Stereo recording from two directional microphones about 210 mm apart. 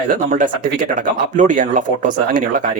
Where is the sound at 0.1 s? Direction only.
40° right (ahead or behind).